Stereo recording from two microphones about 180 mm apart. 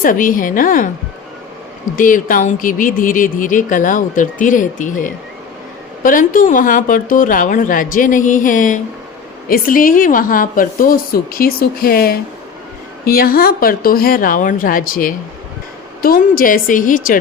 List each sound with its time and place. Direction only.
0.0 s speech: 50° left (ahead or behind)
2.0 s speech: 50° left (ahead or behind)